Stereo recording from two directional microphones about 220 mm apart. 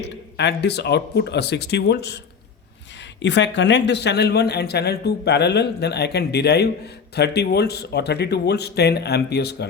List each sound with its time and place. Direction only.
0.0 s speech: 50° left (ahead or behind)
3.2 s speech: 55° left (ahead or behind)